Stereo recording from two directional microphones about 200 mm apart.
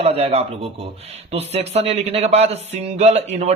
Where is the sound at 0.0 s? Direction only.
30° right (ahead or behind).